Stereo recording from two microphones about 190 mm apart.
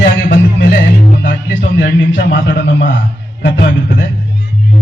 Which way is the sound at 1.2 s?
55° left (ahead or behind).